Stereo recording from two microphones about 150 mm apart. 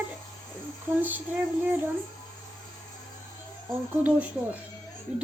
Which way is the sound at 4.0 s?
10° right (ahead or behind).